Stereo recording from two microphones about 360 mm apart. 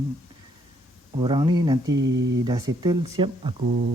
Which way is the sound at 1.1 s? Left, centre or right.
Centre.